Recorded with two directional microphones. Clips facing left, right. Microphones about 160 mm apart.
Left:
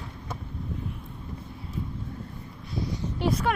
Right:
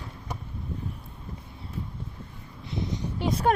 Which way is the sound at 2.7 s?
20° right (ahead or behind).